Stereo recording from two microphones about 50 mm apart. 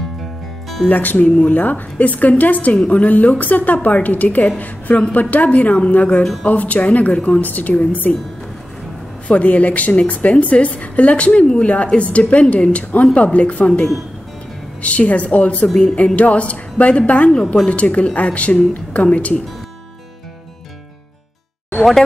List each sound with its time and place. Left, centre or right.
0.8 s a woman's voice: left
9.3 s a woman's voice: left